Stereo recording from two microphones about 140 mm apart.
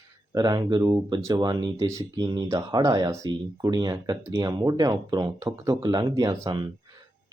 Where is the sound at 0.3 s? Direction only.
30° right (ahead or behind).